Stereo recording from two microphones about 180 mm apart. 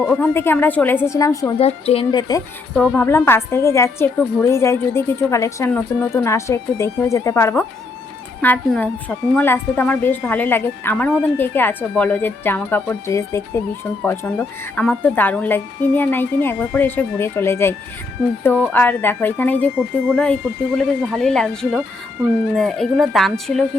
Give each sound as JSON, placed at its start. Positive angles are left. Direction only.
{"t": 0.0, "sound": "a woman's voice", "side_deg": 10}
{"t": 1.5, "sound": "a woman's voice", "side_deg": 35}
{"t": 2.0, "sound": "a woman's voice", "side_deg": 20}
{"t": 2.7, "sound": "a woman's voice", "side_deg": 5}